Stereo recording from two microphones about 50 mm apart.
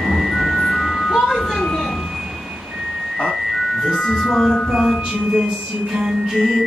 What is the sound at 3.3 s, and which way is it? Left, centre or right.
Music, centre.